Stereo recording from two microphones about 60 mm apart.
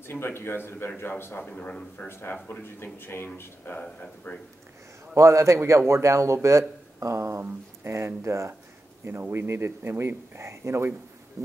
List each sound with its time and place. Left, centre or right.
0.0 s speech: left
1.4 s speech: centre
2.0 s speech: left
3.8 s speech: centre
5.1 s a man's voice: right
9.0 s speech: right
11.4 s music: right